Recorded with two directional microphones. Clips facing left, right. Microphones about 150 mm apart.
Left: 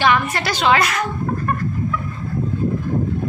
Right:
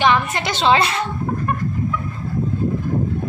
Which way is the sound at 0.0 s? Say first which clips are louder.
Even; 20° right (ahead or behind).